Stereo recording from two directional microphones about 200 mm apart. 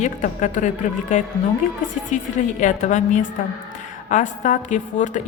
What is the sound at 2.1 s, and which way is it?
A woman's voice, 40° left (ahead or behind).